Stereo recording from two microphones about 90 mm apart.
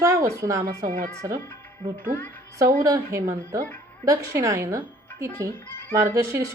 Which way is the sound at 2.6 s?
40° right (ahead or behind).